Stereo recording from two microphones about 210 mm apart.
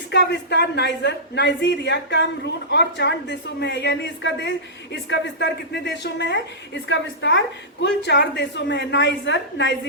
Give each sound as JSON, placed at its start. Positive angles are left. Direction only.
{"t": 0.1, "sound": "a woman's voice", "side_deg": 55}